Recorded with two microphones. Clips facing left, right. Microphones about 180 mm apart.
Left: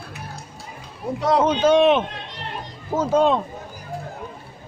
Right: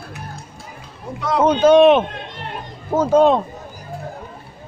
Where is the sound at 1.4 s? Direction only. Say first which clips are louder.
Right 7 dB; 50° right (ahead or behind).